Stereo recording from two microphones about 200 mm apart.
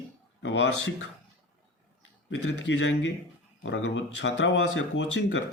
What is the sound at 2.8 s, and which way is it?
Speech, 65° left (ahead or behind).